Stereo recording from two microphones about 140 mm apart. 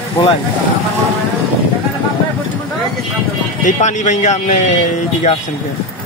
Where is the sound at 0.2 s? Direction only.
35° left (ahead or behind).